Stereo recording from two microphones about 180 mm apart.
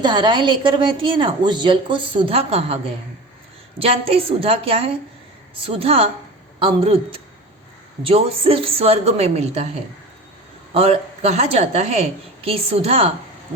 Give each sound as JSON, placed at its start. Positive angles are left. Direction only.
{"t": 0.0, "sound": "a woman's voice", "side_deg": -25}
{"t": 8.0, "sound": "a woman's voice", "side_deg": -30}
{"t": 10.8, "sound": "a woman's voice", "side_deg": -35}